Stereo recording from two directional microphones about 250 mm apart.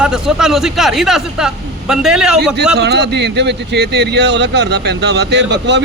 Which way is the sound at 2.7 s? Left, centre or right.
Right.